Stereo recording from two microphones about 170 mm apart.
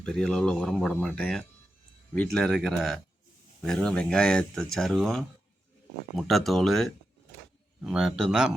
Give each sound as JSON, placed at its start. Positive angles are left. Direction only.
{"t": 0.0, "sound": "speech", "side_deg": 5}